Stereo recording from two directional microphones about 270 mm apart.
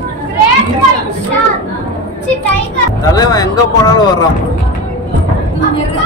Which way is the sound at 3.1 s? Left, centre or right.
Centre.